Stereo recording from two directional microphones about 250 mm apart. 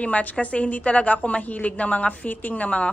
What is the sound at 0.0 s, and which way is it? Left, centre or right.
A woman's voice, centre.